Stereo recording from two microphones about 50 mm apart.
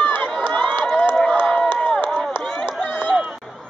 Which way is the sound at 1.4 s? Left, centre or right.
Centre.